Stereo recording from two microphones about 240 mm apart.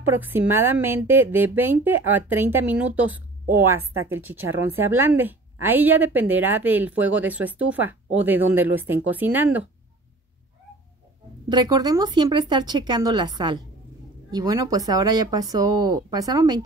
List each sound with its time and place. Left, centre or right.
0.0 s a woman's voice: centre
11.4 s a woman's voice: centre